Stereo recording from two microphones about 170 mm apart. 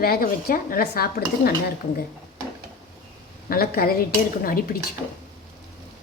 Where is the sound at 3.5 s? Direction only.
60° left (ahead or behind).